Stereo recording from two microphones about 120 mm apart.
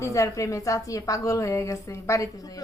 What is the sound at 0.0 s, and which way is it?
A woman's voice, 25° left (ahead or behind).